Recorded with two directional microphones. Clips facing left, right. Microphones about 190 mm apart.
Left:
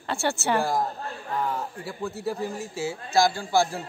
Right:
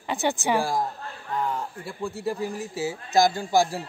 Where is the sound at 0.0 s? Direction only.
15° right (ahead or behind).